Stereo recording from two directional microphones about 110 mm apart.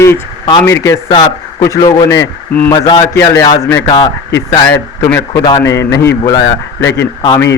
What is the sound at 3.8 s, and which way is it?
Speech, 45° left (ahead or behind).